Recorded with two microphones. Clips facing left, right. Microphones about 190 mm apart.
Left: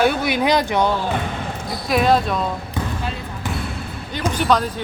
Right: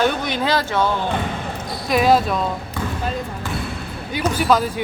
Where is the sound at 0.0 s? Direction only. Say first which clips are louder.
Left 2 dB; 10° left (ahead or behind).